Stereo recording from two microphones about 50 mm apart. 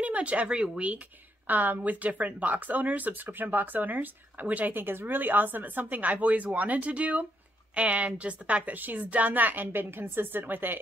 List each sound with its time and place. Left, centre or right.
0.0 s a woman's voice: right
1.5 s a woman's voice: right